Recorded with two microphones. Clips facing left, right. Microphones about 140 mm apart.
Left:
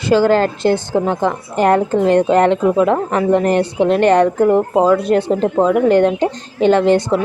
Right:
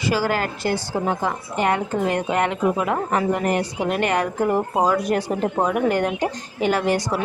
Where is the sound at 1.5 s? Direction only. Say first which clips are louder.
Left 9 dB; 35° left (ahead or behind).